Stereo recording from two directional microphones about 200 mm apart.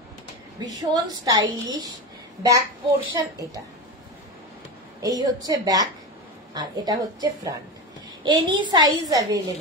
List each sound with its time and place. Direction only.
0.6 s a woman's voice: 20° right (ahead or behind)
5.0 s a child's voice: 20° right (ahead or behind)